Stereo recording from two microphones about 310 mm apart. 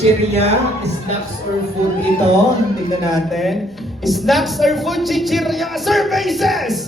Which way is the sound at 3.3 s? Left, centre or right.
Centre.